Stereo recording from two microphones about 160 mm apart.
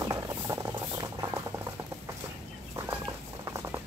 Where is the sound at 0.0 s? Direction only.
20° right (ahead or behind).